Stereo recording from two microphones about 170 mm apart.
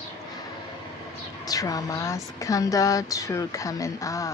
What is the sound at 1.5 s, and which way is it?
Speech, 20° left (ahead or behind).